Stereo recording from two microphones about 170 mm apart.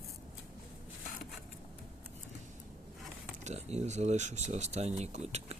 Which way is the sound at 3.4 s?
40° right (ahead or behind).